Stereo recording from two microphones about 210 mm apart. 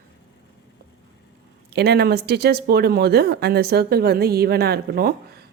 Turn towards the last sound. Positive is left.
turn(degrees=-45)  # may be behind; listen again after turning